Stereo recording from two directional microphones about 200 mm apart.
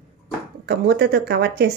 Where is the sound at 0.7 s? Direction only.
55° right (ahead or behind).